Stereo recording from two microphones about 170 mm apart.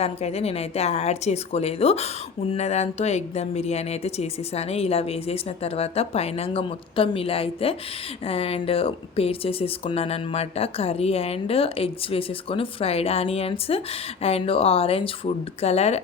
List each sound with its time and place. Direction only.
0.0 s speech: 40° left (ahead or behind)